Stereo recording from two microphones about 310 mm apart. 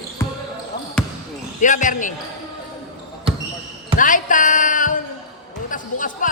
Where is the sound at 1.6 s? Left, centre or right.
Left.